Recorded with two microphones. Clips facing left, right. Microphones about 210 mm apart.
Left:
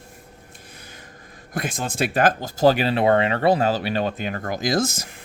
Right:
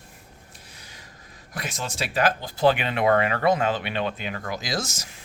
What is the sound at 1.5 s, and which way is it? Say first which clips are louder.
Speech: left 6 dB; 50° left (ahead or behind).